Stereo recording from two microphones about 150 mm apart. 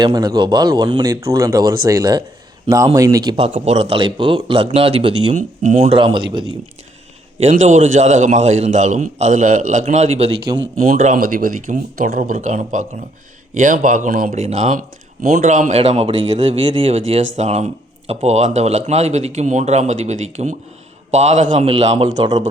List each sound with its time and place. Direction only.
0.0 s a man's voice: 30° right (ahead or behind)
1.1 s a man's voice: 20° right (ahead or behind)
3.3 s a man's voice: 40° right (ahead or behind)
5.3 s a man's voice: 50° right (ahead or behind)
6.0 s a man's voice: 35° right (ahead or behind)
7.4 s a man's voice: 55° right (ahead or behind)
10.9 s speech: 60° right (ahead or behind)
14.3 s a man's voice: 45° right (ahead or behind)
15.2 s a man's voice: 55° right (ahead or behind)